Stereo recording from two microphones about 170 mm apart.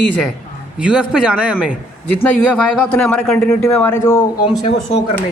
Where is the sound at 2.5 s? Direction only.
5° left (ahead or behind).